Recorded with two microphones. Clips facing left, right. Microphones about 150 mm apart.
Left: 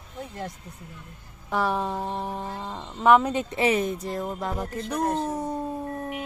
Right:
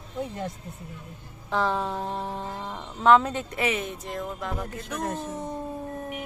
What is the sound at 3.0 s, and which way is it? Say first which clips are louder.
Speech: left 1 dB; 15° left (ahead or behind).